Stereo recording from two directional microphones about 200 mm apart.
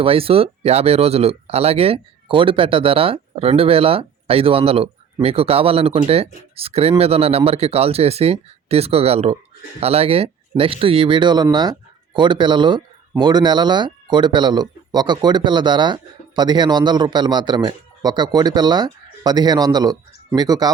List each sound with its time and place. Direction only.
0.0 s speech: 30° right (ahead or behind)